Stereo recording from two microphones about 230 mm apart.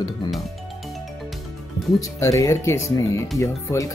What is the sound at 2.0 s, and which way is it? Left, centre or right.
Speech, centre.